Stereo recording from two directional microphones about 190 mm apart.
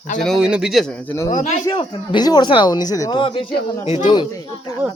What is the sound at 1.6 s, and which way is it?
Speech, 25° left (ahead or behind).